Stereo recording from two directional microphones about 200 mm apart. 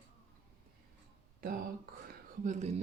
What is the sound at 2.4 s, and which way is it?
Speech, 35° right (ahead or behind).